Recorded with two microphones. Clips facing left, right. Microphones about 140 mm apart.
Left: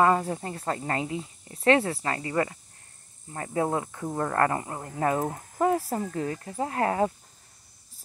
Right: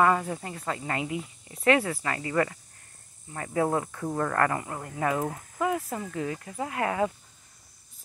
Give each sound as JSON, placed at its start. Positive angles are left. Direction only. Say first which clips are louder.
{"t": 0.0, "sound": "speech", "louder": "left 1 dB", "side_deg": 30}